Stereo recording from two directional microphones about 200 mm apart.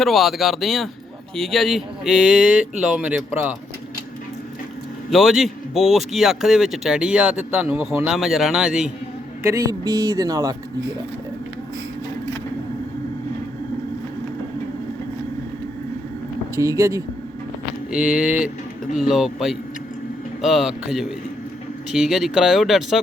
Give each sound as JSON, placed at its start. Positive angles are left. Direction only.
{"t": 0.0, "sound": "speech", "side_deg": 0}
{"t": 5.1, "sound": "speech", "side_deg": 0}
{"t": 9.4, "sound": "speech", "side_deg": -15}
{"t": 16.6, "sound": "speech", "side_deg": -15}
{"t": 17.9, "sound": "speech", "side_deg": -5}